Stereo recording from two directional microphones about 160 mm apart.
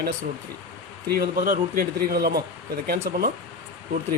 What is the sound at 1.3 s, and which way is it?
Speech, 60° right (ahead or behind).